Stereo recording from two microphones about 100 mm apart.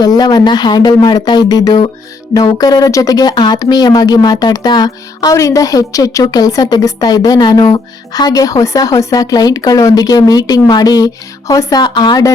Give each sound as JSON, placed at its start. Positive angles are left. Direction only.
{"t": 0.0, "sound": "speech", "side_deg": 40}